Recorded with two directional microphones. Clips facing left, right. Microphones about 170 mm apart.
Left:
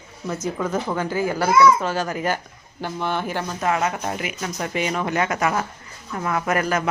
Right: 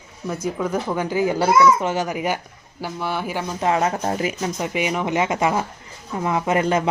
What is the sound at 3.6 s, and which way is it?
Speech, 30° right (ahead or behind).